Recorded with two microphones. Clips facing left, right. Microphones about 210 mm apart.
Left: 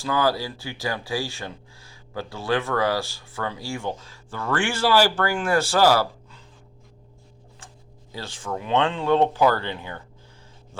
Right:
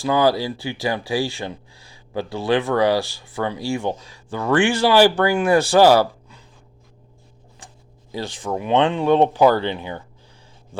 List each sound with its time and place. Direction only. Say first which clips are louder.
0.0 s speech: right 5 dB; 15° right (ahead or behind)
8.1 s speech: right 6 dB; 15° right (ahead or behind)